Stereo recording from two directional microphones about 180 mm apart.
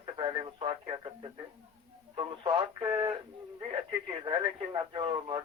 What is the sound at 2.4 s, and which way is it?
Speech, 20° right (ahead or behind).